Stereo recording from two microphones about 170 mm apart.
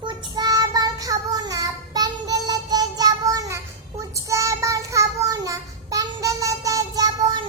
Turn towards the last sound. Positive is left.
turn(degrees=-25)  # may be behind; listen again after turning